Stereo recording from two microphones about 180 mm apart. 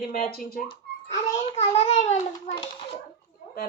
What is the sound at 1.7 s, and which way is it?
A child's voice, 35° left (ahead or behind).